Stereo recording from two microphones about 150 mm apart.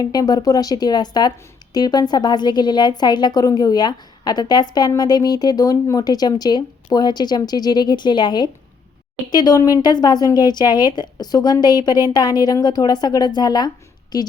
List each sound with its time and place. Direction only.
0.0 s a woman's voice: 25° left (ahead or behind)